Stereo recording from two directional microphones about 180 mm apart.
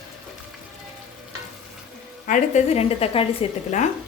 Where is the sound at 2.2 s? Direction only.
45° left (ahead or behind).